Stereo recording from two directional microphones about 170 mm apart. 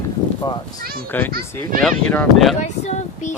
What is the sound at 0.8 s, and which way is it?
Speech, 60° right (ahead or behind).